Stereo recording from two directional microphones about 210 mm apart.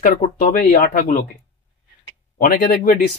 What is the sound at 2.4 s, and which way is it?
Speech, 45° left (ahead or behind).